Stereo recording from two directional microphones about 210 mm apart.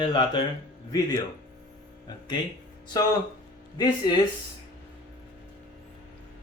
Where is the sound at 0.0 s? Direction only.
20° left (ahead or behind).